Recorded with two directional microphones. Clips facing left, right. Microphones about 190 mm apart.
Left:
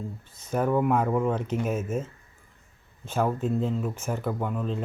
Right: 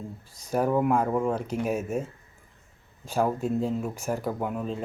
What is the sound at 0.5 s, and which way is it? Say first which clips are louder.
Speech: even; 10° right (ahead or behind).